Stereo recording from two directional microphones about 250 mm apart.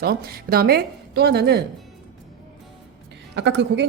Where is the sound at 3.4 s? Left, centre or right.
Right.